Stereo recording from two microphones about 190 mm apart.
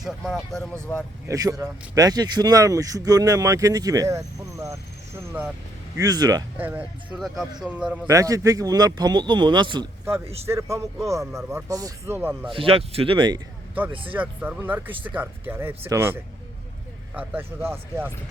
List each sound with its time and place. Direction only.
0.0 s speech: centre (ahead or behind)
0.7 s speech: 10° left (ahead or behind)
1.3 s speech: 15° right (ahead or behind)
6.0 s speech: 20° right (ahead or behind)
6.6 s speech: 10° right (ahead or behind)
8.1 s speech: 20° right (ahead or behind)
12.5 s speech: 30° right (ahead or behind)
14.1 s speech: 10° right (ahead or behind)